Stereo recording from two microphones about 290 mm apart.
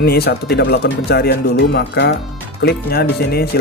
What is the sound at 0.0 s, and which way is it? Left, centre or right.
Speech, left.